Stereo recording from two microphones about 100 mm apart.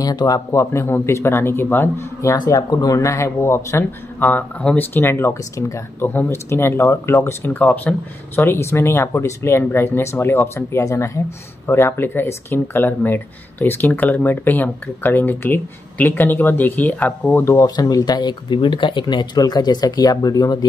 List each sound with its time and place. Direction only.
0.0 s speech: 40° left (ahead or behind); by 2.3 s 25° left (ahead or behind)
2.4 s speech: 35° left (ahead or behind)
7.9 s speech: 15° left (ahead or behind)
8.4 s speech: 25° left (ahead or behind)
17.6 s speech: 40° left (ahead or behind)